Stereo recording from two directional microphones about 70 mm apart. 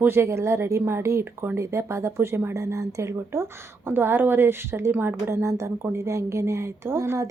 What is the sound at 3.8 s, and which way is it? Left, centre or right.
Speech, right.